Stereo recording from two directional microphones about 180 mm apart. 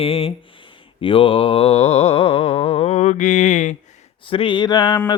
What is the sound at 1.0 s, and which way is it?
Music, 30° left (ahead or behind).